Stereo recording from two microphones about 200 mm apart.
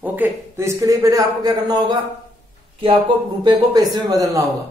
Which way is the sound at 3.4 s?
20° right (ahead or behind).